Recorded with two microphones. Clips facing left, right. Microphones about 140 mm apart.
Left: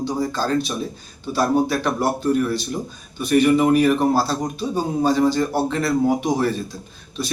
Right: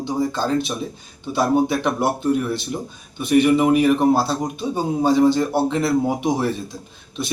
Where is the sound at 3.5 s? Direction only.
5° right (ahead or behind).